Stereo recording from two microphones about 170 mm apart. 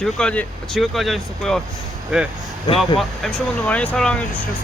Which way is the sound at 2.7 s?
30° left (ahead or behind).